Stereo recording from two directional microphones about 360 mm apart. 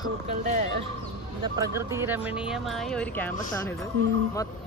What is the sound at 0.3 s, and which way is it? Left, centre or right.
Speech, centre.